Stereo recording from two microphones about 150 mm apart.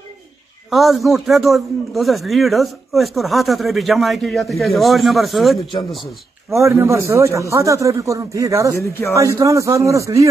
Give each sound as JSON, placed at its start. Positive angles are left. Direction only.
{"t": 0.7, "sound": "a man's voice", "side_deg": 0}
{"t": 6.5, "sound": "a man's voice", "side_deg": -20}